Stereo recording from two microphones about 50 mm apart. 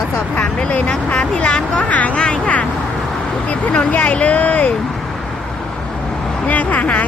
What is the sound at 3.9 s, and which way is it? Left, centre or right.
Speech, left.